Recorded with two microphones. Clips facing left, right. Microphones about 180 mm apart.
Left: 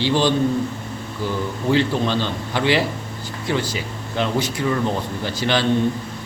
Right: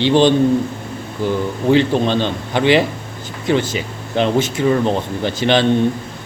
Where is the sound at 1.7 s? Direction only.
20° right (ahead or behind).